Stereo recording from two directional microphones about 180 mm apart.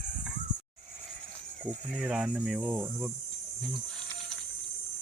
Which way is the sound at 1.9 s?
Centre (ahead or behind).